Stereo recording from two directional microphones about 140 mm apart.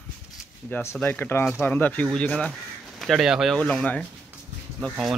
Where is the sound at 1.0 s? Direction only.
15° left (ahead or behind); by 3.6 s centre (ahead or behind).